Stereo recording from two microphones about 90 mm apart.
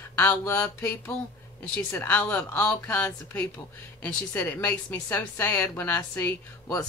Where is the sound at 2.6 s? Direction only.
20° left (ahead or behind).